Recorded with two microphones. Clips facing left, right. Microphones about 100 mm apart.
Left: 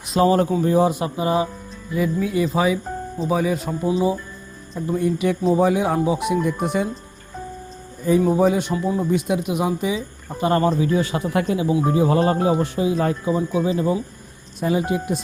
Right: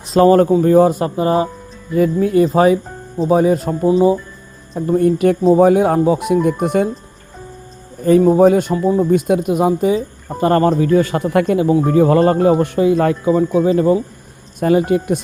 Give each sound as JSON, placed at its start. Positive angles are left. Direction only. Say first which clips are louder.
{"t": 0.2, "sound": "speech", "louder": "right 7 dB", "side_deg": -45}
{"t": 8.2, "sound": "speech", "louder": "right 8 dB", "side_deg": -50}
{"t": 9.0, "sound": "speech", "louder": "right 7 dB", "side_deg": -50}
{"t": 13.7, "sound": "speech", "louder": "right 7 dB", "side_deg": -50}